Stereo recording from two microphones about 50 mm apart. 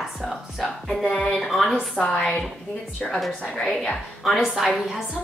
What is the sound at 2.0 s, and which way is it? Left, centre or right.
A woman's voice, centre.